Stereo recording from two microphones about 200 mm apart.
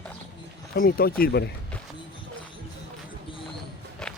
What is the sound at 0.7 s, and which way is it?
Speech, 50° left (ahead or behind).